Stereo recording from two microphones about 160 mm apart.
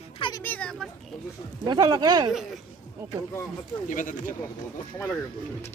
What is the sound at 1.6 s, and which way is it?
Speech, 25° right (ahead or behind).